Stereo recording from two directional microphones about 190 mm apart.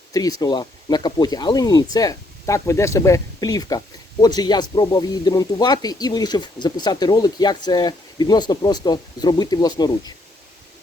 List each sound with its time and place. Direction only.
0.1 s speech: 20° left (ahead or behind)